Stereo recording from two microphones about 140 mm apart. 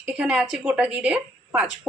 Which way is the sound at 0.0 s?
10° right (ahead or behind).